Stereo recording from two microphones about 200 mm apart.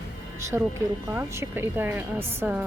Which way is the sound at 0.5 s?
15° right (ahead or behind).